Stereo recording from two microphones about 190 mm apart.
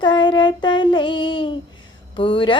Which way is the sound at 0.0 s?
25° left (ahead or behind).